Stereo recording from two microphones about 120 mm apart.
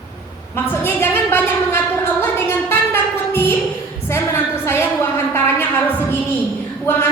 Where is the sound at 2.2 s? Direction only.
20° left (ahead or behind).